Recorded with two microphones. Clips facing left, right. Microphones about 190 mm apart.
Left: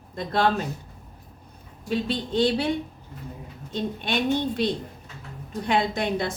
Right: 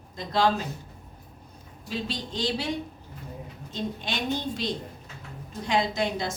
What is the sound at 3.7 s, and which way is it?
A woman's voice, 60° left (ahead or behind).